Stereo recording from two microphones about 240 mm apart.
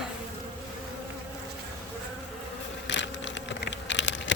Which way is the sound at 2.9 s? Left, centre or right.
Left.